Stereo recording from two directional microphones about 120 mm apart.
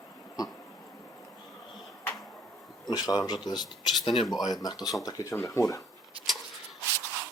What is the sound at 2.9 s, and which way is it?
Speech, 35° left (ahead or behind).